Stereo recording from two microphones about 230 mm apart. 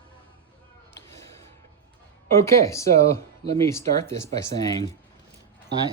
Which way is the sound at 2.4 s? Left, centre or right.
Centre.